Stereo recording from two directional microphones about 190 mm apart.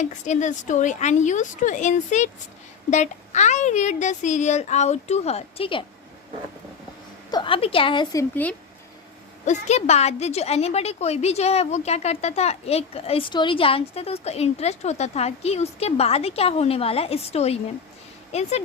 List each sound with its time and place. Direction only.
0.0 s a woman's voice: 40° left (ahead or behind)
7.3 s a woman's voice: 25° left (ahead or behind)
9.5 s a woman's voice: 35° left (ahead or behind)